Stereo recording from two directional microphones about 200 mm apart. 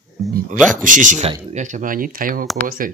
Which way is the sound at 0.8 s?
40° right (ahead or behind).